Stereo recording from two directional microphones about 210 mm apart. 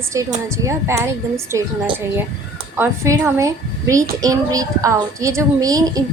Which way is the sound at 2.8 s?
15° right (ahead or behind).